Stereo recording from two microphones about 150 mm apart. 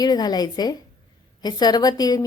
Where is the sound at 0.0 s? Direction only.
25° left (ahead or behind).